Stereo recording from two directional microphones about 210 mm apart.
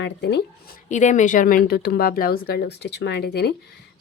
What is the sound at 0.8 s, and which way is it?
Speech, 35° left (ahead or behind).